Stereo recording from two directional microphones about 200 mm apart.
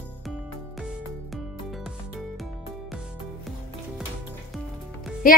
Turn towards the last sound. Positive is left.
turn(degrees=45)  # may be behind; listen again after turning